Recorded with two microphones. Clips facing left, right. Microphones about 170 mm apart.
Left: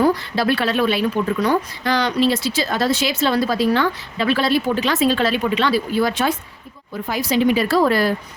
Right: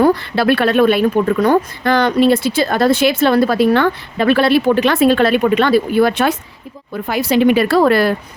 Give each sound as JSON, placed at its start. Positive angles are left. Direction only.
{"t": 0.0, "sound": "speech", "side_deg": -60}